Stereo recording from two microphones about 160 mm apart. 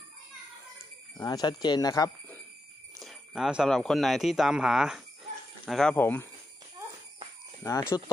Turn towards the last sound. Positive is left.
turn(degrees=15)  # may be behind; listen again after turning